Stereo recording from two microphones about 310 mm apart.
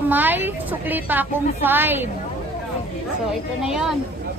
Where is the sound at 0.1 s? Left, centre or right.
Centre.